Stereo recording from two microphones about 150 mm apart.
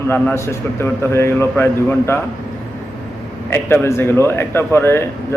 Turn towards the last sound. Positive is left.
turn(degrees=15)  # may be behind; listen again after turning